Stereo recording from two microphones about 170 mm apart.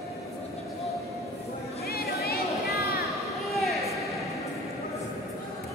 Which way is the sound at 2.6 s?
65° left (ahead or behind).